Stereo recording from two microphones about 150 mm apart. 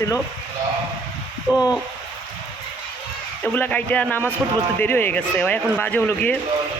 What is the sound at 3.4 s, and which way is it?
Speech, 10° left (ahead or behind).